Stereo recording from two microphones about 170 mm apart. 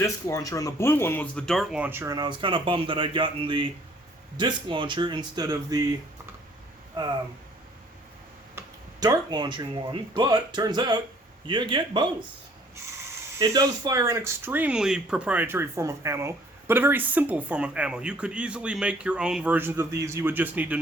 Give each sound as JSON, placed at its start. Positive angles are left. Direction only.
{"t": 0.0, "sound": "speech", "side_deg": 20}
{"t": 2.1, "sound": "speech", "side_deg": -25}
{"t": 8.5, "sound": "speech", "side_deg": -20}
{"t": 13.4, "sound": "speech", "side_deg": -20}